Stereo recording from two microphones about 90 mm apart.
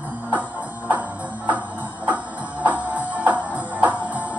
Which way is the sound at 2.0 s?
15° right (ahead or behind).